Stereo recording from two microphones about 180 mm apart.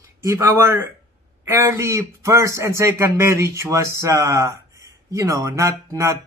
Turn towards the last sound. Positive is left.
turn(degrees=-15)  # may be behind; listen again after turning